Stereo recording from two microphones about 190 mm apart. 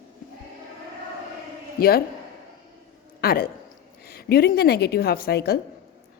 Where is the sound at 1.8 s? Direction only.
55° left (ahead or behind).